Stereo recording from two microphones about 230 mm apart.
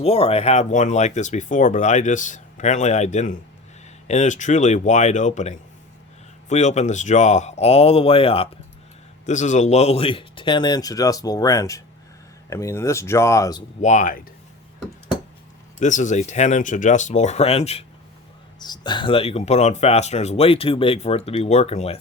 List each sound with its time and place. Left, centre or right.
0.0 s speech: left
13.8 s speech: left
15.8 s speech: left